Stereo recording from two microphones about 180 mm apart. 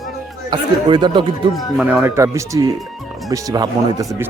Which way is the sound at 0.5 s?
25° right (ahead or behind).